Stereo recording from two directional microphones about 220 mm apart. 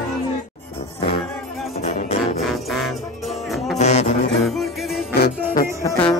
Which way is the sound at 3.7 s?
30° left (ahead or behind).